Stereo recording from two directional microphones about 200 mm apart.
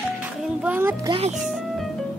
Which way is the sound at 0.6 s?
10° right (ahead or behind).